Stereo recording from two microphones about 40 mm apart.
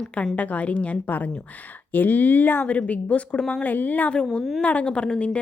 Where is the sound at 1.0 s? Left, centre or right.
Left.